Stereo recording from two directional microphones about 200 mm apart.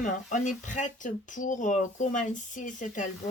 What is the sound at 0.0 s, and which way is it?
Speech, 40° left (ahead or behind).